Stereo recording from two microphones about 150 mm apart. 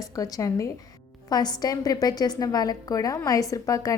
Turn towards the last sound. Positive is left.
turn(degrees=20)  # may be behind; listen again after turning